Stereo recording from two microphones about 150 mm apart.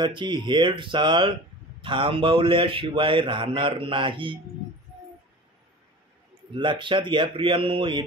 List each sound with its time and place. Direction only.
0.0 s a man's voice: 30° right (ahead or behind)
6.5 s a man's voice: 35° right (ahead or behind)